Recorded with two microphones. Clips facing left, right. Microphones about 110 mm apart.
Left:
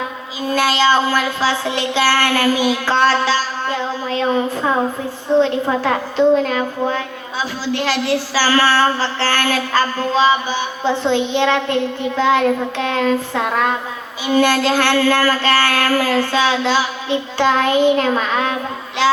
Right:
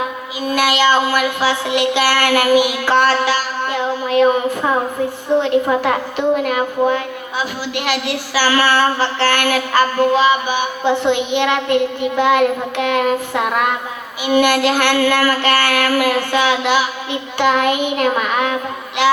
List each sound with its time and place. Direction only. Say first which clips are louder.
0.5 s a woman's voice: even; 15° right (ahead or behind)